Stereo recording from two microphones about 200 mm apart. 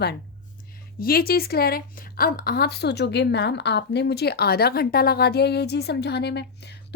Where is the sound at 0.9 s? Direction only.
45° left (ahead or behind).